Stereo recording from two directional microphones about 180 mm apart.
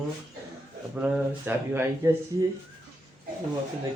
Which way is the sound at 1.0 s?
5° right (ahead or behind).